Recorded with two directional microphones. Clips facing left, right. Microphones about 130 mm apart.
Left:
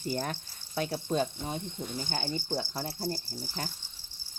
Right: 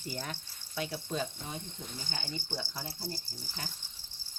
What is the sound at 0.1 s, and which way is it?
Speech, 45° left (ahead or behind).